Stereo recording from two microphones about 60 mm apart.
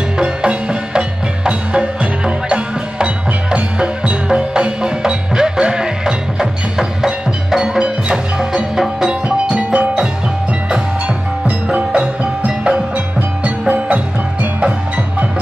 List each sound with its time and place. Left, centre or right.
0.2 s music: centre
9.5 s music: centre
11.4 s music: centre